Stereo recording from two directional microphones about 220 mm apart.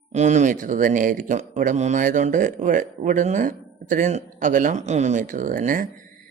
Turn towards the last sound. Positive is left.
turn(degrees=-35)  # may be behind; listen again after turning